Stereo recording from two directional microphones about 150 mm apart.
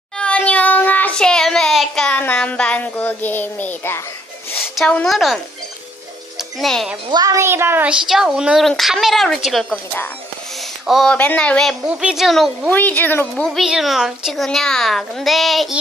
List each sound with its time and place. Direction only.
0.2 s child singing: 10° left (ahead or behind)
4.7 s a woman's voice: 5° left (ahead or behind)
6.6 s a woman's voice: centre (ahead or behind)
7.1 s speech: 25° right (ahead or behind)
8.0 s a woman's voice: 5° right (ahead or behind)
10.8 s a woman's voice: centre (ahead or behind)
12.7 s speech: 10° left (ahead or behind)
13.3 s a woman's voice: centre (ahead or behind)